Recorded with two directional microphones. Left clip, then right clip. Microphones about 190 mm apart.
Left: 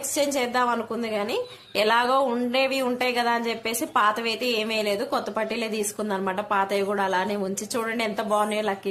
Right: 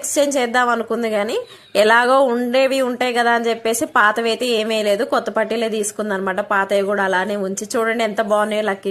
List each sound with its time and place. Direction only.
0.2 s speech: 25° right (ahead or behind)